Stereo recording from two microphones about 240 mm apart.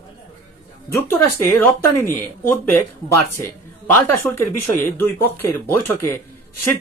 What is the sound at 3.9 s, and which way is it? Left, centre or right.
Speech, centre.